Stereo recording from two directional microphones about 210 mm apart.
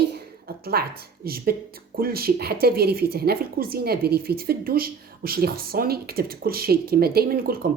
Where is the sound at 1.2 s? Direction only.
45° right (ahead or behind).